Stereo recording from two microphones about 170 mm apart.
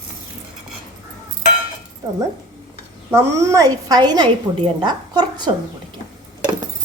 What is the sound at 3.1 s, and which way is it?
Speech, 15° right (ahead or behind).